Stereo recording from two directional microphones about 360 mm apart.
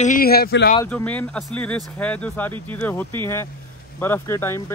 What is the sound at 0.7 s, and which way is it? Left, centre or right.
A man's voice, centre.